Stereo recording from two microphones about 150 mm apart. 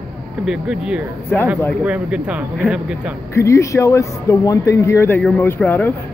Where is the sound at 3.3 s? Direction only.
20° left (ahead or behind).